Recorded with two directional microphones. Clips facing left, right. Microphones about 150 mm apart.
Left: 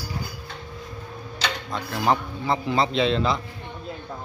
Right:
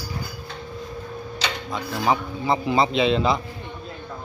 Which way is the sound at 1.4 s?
5° right (ahead or behind).